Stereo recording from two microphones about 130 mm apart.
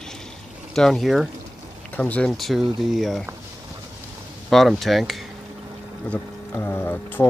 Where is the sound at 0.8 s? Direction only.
Centre (ahead or behind).